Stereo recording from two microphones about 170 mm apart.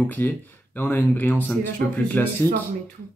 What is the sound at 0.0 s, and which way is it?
Speech, 10° left (ahead or behind).